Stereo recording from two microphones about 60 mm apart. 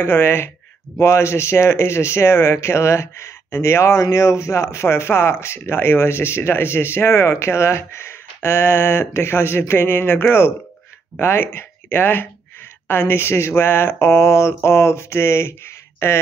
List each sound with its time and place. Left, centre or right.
0.0 s speech: left
0.9 s speech: left